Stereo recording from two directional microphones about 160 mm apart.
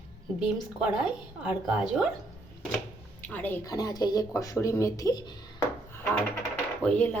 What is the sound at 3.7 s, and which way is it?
Speech, 25° left (ahead or behind).